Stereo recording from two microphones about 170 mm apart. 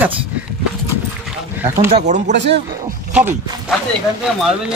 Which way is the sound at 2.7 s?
15° right (ahead or behind).